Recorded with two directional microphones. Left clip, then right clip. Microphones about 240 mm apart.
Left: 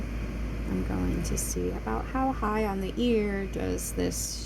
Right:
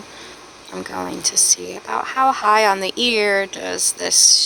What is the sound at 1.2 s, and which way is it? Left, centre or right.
Speech, right.